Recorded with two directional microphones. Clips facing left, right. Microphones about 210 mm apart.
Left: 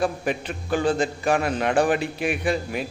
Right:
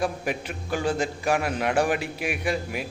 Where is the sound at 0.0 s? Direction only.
10° right (ahead or behind).